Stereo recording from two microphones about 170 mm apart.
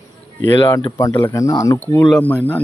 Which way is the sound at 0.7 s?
20° left (ahead or behind).